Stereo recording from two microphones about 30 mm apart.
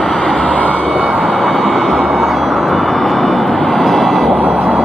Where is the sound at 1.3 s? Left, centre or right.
Left.